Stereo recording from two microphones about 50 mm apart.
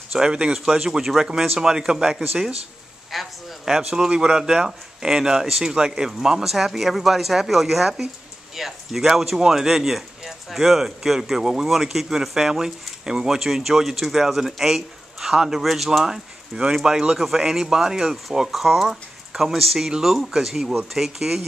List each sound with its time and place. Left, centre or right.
0.1 s a man's voice: centre